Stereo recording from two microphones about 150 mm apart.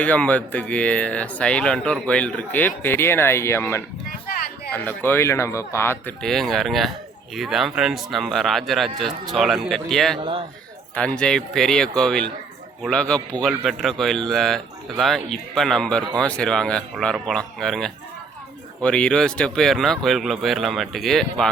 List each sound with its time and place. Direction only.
0.0 s speech: 10° left (ahead or behind)
6.2 s speech: centre (ahead or behind)
10.2 s a man's voice: 35° right (ahead or behind)
10.9 s speech: 5° left (ahead or behind)